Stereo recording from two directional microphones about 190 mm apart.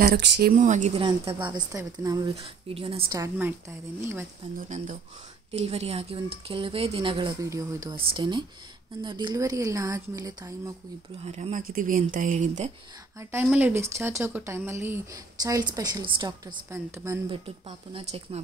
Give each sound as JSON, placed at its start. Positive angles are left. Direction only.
{"t": 0.0, "sound": "a woman's voice", "side_deg": -60}
{"t": 2.3, "sound": "speech", "side_deg": -30}
{"t": 3.2, "sound": "speech", "side_deg": -15}
{"t": 4.6, "sound": "a woman's voice", "side_deg": -40}
{"t": 11.2, "sound": "speech", "side_deg": -35}
{"t": 13.2, "sound": "speech", "side_deg": -10}
{"t": 17.3, "sound": "speech", "side_deg": -30}